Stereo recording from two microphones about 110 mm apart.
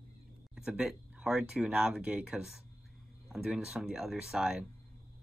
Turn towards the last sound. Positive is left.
turn(degrees=-5)  # may be behind; listen again after turning